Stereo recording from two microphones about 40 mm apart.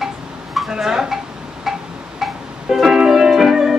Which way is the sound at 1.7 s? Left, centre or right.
Centre.